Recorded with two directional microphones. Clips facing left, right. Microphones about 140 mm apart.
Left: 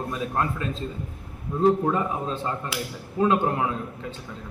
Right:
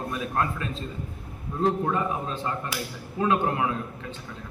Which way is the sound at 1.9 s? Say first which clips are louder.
Left 1 dB; 25° left (ahead or behind).